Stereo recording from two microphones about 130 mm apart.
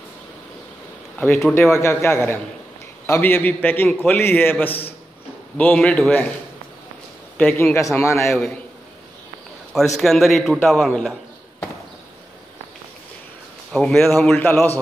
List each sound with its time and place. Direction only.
1.7 s a man's voice: 20° left (ahead or behind); by 6.1 s 5° left (ahead or behind)
7.3 s a man's voice: 10° left (ahead or behind)
7.7 s a man's voice: 20° left (ahead or behind)
8.3 s a man's voice: centre (ahead or behind)
9.8 s a man's voice: centre (ahead or behind)
13.7 s a man's voice: 5° left (ahead or behind)
14.4 s a man's voice: 15° left (ahead or behind)